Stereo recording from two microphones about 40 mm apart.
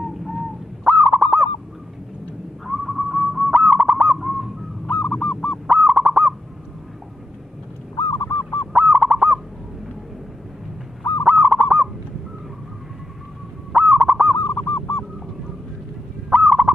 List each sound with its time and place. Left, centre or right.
0.0 s bird: centre
0.9 s fowl: right
2.6 s a sound: centre
3.4 s a sound: centre
3.9 s bird: right
4.2 s bird: centre
5.0 s goose: centre
5.7 s owl: right
8.3 s goose: left
8.7 s owl: right
11.2 s owl: right
13.7 s owl: right
14.3 s bird: left
16.3 s gobble: right